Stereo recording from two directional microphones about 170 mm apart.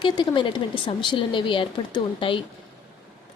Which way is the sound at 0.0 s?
30° left (ahead or behind).